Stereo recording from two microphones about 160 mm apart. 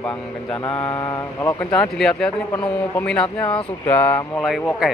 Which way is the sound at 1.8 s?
5° left (ahead or behind).